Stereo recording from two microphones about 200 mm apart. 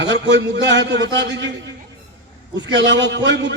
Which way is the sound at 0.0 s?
60° right (ahead or behind).